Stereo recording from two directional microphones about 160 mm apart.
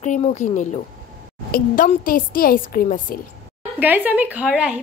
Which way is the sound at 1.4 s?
65° left (ahead or behind).